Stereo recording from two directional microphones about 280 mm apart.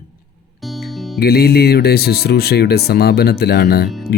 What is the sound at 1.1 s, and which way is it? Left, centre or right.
Speech, left.